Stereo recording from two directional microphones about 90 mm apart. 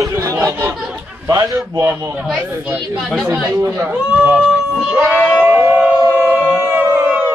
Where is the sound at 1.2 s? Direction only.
35° right (ahead or behind).